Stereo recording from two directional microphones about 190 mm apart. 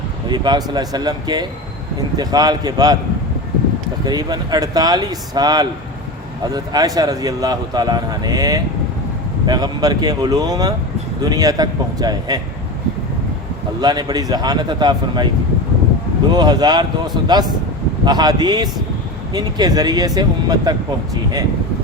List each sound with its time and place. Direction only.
0.3 s a man's voice: 20° right (ahead or behind)
4.0 s a man's voice: 20° right (ahead or behind)
13.8 s a man's voice: 20° right (ahead or behind)
16.3 s a man's voice: 20° right (ahead or behind)